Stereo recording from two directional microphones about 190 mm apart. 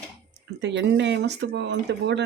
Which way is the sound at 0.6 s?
70° right (ahead or behind).